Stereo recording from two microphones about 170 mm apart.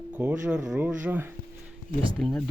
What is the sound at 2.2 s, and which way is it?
Speech, centre (ahead or behind).